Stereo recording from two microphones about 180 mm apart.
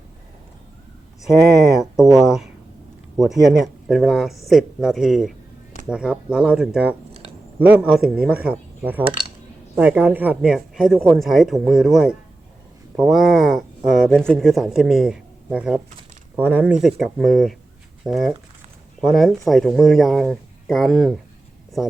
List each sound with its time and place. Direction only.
1.8 s speech: centre (ahead or behind)